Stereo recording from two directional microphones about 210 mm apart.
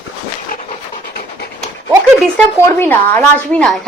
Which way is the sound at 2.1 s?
5° left (ahead or behind).